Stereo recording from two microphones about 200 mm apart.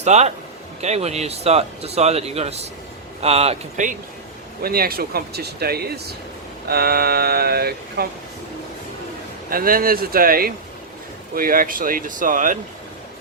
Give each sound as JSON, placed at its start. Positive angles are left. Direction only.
{"t": 0.0, "sound": "speech", "side_deg": -35}
{"t": 4.6, "sound": "speech", "side_deg": -50}
{"t": 9.5, "sound": "speech", "side_deg": -45}